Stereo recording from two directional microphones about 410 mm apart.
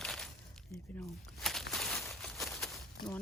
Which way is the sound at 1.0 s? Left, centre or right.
Centre.